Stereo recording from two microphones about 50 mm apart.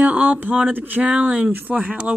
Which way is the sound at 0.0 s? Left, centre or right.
Right.